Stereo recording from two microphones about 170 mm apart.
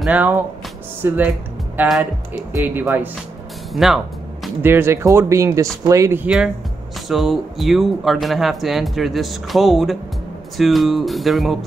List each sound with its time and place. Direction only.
0.0 s speech: 10° right (ahead or behind)
4.6 s speech: 15° right (ahead or behind)